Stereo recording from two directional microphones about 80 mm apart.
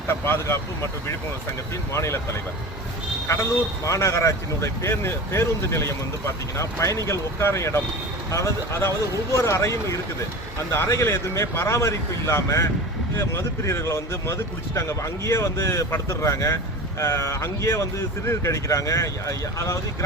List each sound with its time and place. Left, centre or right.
0.1 s speech: left
1.9 s speech: left
3.2 s speech: left